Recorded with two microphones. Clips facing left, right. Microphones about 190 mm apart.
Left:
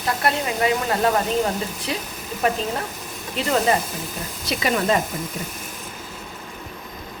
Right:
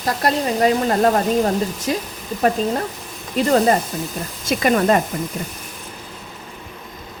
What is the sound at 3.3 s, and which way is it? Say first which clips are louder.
Speech: right 5 dB; 45° right (ahead or behind).